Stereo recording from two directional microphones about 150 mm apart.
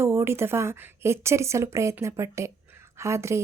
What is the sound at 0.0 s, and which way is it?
A woman's voice, 15° right (ahead or behind).